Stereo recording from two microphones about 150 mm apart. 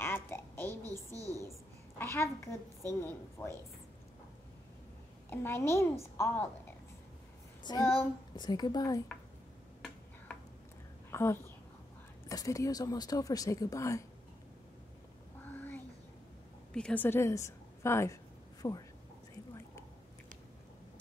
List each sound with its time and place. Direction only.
0.0 s a sound: 15° left (ahead or behind)
1.1 s a sound: 20° right (ahead or behind)
2.0 s a woman's voice: 15° left (ahead or behind)
5.3 s a woman's voice: 15° left (ahead or behind)
7.8 s a woman's voice: 15° left (ahead or behind)
8.4 s speech: 25° left (ahead or behind)
11.1 s speech: 15° left (ahead or behind)
15.4 s a sound: 10° left (ahead or behind)
16.7 s a woman's voice: 10° left (ahead or behind)